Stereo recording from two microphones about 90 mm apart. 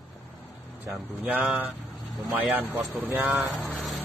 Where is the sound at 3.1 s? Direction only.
20° right (ahead or behind).